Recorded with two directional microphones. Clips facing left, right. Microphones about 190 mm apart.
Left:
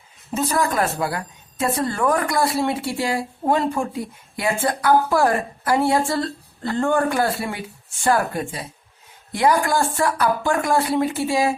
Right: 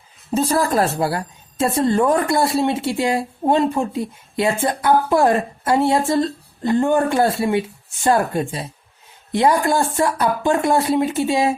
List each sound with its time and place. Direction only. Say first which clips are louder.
0.3 s a woman's voice: right 3 dB; 30° right (ahead or behind)